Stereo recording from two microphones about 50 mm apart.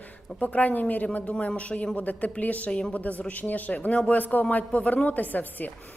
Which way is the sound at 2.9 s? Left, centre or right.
Left.